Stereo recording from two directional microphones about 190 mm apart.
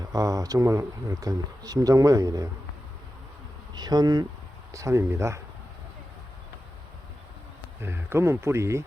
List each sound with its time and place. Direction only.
0.0 s speech: 20° right (ahead or behind)
3.8 s speech: 20° right (ahead or behind)
7.8 s speech: 15° right (ahead or behind)